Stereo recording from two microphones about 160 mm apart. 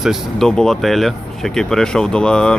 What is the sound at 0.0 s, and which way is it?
Speech, centre (ahead or behind).